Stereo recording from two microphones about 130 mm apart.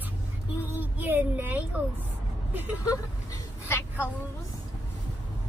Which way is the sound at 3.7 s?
15° left (ahead or behind).